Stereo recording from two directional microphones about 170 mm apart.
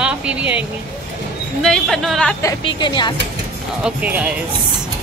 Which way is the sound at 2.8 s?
25° left (ahead or behind).